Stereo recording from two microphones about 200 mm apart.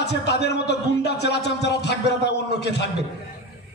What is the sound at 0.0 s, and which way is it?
Speech, 55° left (ahead or behind).